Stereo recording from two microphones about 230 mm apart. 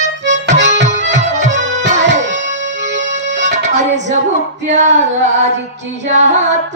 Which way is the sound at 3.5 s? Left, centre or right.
Right.